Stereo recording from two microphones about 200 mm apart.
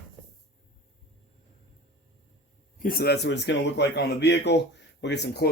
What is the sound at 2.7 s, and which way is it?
Speech, 45° left (ahead or behind).